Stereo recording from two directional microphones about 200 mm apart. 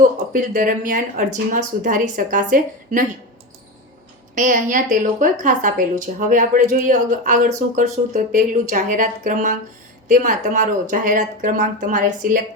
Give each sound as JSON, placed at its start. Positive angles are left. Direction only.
{"t": 0.0, "sound": "speech", "side_deg": -40}
{"t": 4.4, "sound": "speech", "side_deg": -40}